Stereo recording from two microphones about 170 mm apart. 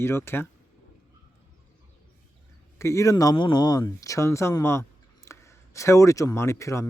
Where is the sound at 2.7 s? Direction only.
15° left (ahead or behind).